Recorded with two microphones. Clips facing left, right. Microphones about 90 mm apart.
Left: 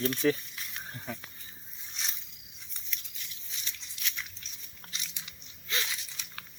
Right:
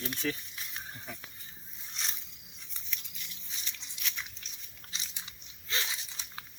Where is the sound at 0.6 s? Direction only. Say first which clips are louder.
Left 1 dB; 20° right (ahead or behind).